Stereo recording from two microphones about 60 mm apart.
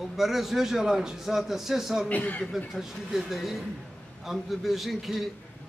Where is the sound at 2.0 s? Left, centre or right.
Left.